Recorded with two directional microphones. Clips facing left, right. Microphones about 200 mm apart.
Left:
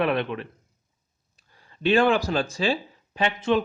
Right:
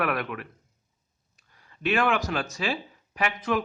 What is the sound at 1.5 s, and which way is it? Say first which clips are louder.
Speech: left 5 dB; 30° left (ahead or behind).